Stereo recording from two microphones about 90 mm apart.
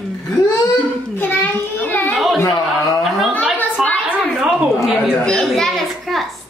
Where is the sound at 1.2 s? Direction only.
20° left (ahead or behind).